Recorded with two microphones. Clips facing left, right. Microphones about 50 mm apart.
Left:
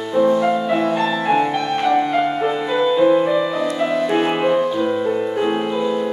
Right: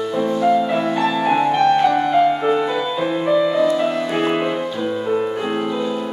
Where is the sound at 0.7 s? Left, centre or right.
Centre.